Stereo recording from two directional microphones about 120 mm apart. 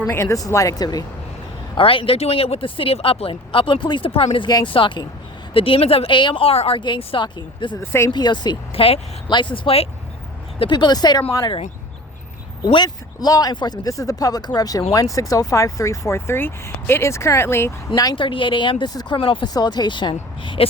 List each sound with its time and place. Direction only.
0.1 s speech: 25° left (ahead or behind)
1.7 s speech: 45° left (ahead or behind)
4.3 s speech: 35° left (ahead or behind)
7.8 s speech: 20° left (ahead or behind)
8.1 s speech: 40° left (ahead or behind)
8.7 s speech: 50° left (ahead or behind); by 11.2 s 35° left (ahead or behind)
12.6 s speech: 35° left (ahead or behind); by 17.7 s 20° left (ahead or behind)
17.9 s speech: 35° left (ahead or behind)